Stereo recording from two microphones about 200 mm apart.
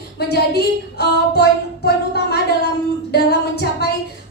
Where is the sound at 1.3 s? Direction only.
55° left (ahead or behind).